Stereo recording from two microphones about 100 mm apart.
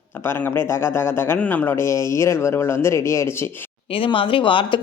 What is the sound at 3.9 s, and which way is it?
Speech, 60° left (ahead or behind).